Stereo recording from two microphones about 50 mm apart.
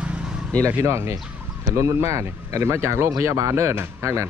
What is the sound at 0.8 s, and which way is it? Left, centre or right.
Speech, right.